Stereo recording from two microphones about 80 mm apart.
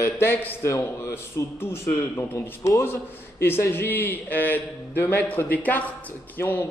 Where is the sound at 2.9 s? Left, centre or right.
Left.